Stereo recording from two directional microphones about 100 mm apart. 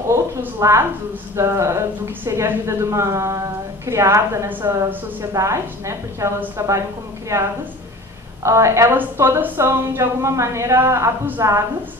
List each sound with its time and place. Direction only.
0.1 s a woman's voice: 25° right (ahead or behind)
4.5 s a woman's voice: 20° right (ahead or behind)
5.3 s a woman's voice: 30° right (ahead or behind)